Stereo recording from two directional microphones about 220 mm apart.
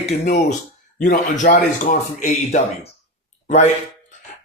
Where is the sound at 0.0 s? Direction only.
35° left (ahead or behind).